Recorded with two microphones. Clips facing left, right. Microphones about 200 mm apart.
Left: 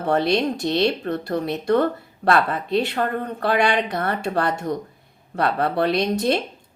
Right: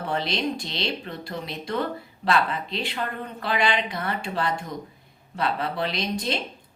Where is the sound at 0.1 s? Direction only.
55° left (ahead or behind).